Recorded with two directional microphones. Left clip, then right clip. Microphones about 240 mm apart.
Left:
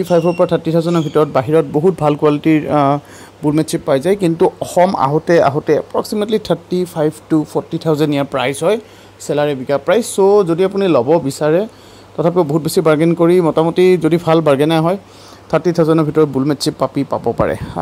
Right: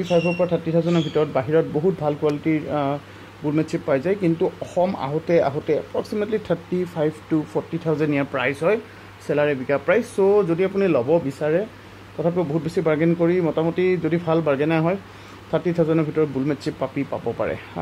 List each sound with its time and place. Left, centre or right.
0.1 s speech: left
15.5 s speech: centre